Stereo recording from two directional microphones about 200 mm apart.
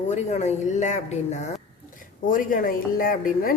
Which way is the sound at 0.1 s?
35° left (ahead or behind).